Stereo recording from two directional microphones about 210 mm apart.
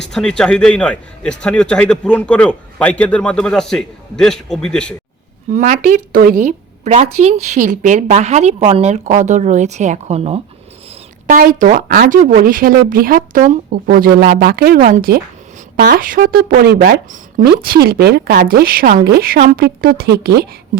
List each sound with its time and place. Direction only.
0.1 s a man's voice: 5° left (ahead or behind)
5.5 s a woman's voice: 35° right (ahead or behind)
11.3 s a woman's voice: 40° right (ahead or behind)